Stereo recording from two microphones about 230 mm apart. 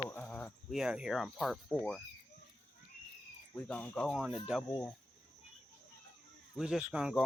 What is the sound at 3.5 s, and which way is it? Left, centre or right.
Speech, centre.